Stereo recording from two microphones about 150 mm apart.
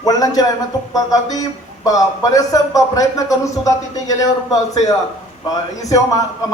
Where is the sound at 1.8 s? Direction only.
25° left (ahead or behind).